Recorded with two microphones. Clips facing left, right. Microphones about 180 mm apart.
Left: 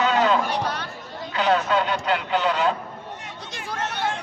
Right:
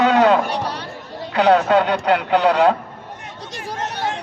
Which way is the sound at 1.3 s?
65° right (ahead or behind).